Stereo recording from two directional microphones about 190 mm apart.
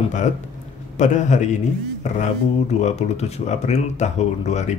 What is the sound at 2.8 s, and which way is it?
Speech, 35° left (ahead or behind).